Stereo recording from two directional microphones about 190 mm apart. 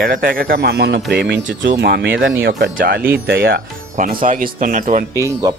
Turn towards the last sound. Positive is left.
turn(degrees=-20)  # may be behind; listen again after turning